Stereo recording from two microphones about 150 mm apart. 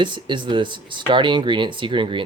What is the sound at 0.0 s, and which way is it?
Speech, 30° right (ahead or behind).